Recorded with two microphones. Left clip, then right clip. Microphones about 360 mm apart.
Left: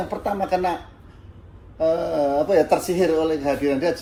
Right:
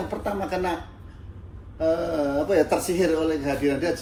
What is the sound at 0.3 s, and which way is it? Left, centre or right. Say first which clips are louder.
Speech: left 5 dB; left.